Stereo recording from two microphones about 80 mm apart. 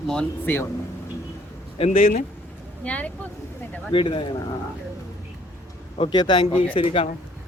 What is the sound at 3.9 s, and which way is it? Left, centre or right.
Speech, left.